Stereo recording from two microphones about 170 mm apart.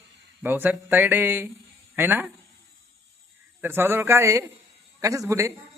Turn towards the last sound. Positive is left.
turn(degrees=-20)  # may be behind; listen again after turning